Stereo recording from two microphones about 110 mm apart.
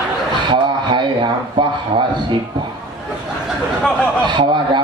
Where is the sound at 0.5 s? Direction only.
45° right (ahead or behind).